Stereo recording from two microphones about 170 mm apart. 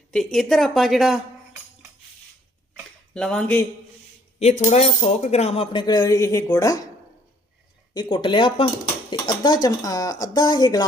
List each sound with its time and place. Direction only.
0.1 s a woman's voice: 5° left (ahead or behind)
3.2 s speech: 5° left (ahead or behind)
4.4 s speech: 40° left (ahead or behind); by 6.8 s 20° left (ahead or behind)
7.9 s speech: 30° left (ahead or behind)